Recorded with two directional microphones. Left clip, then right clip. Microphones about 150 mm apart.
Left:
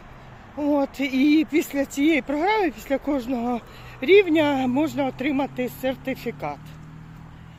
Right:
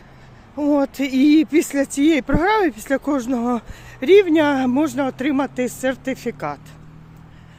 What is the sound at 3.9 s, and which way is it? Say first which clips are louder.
Speech: right 3 dB; 35° right (ahead or behind).